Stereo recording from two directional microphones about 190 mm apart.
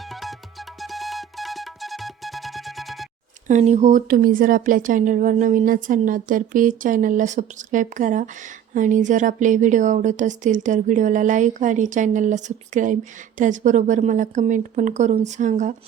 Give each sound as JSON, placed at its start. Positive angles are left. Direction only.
{"t": 0.1, "sound": "music", "side_deg": 0}
{"t": 3.4, "sound": "speech", "side_deg": -35}